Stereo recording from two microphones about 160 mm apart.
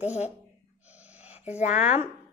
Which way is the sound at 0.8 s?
10° right (ahead or behind).